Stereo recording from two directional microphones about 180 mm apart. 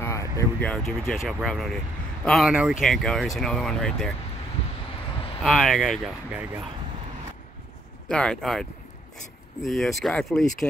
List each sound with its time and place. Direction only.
0.0 s a sound: 15° left (ahead or behind)
0.7 s speech: centre (ahead or behind)
5.4 s speech: centre (ahead or behind)
8.1 s speech: 5° left (ahead or behind)
9.7 s speech: centre (ahead or behind)